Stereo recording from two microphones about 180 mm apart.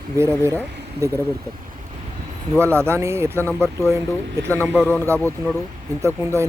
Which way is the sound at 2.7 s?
15° right (ahead or behind).